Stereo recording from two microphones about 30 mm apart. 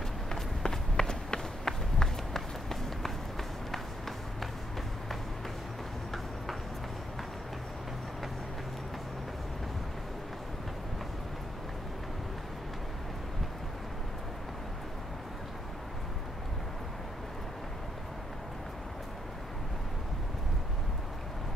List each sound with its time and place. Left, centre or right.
0.3 s run: centre